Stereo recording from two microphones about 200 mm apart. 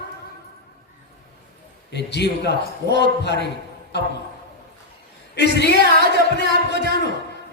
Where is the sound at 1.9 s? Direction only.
55° left (ahead or behind).